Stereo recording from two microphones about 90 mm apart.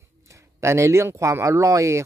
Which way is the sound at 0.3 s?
30° right (ahead or behind).